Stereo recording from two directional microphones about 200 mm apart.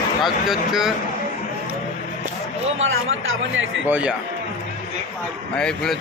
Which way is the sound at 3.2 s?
75° right (ahead or behind).